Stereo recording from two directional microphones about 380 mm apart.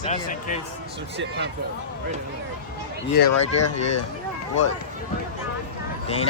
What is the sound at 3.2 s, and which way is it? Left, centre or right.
Speech, left.